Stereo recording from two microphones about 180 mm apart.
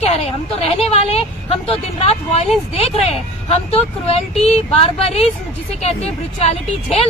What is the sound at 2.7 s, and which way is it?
A woman's voice, 35° left (ahead or behind).